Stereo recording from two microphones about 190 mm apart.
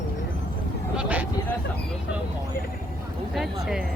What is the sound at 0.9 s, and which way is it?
Speech, 5° right (ahead or behind).